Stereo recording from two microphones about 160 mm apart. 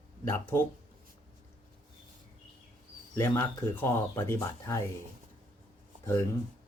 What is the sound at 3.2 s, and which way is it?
Speech, 15° left (ahead or behind).